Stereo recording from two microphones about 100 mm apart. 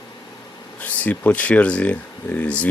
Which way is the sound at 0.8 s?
15° left (ahead or behind).